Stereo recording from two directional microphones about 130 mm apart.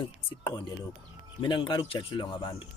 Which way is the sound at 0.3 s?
40° left (ahead or behind).